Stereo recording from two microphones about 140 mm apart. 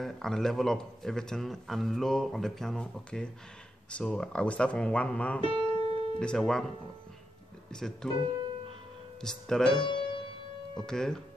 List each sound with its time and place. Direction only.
0.0 s speech: 5° left (ahead or behind)
5.4 s music: 40° right (ahead or behind)
6.1 s speech: 5° left (ahead or behind)
7.7 s speech: 5° left (ahead or behind)
9.2 s speech: 5° left (ahead or behind)
9.8 s music: 35° left (ahead or behind)
10.9 s speech: 5° left (ahead or behind)